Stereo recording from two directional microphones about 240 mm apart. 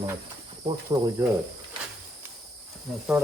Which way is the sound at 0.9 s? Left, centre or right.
Centre.